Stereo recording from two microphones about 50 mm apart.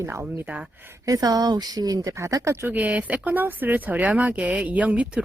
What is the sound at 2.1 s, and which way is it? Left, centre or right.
Speech, right.